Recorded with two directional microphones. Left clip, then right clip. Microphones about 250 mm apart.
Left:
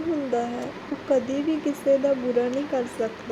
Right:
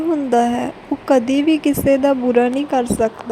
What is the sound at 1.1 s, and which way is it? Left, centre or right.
A woman's voice, right.